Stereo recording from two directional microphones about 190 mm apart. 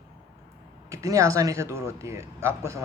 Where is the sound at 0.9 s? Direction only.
15° right (ahead or behind).